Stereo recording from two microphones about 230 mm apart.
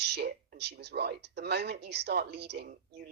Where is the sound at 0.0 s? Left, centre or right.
Right.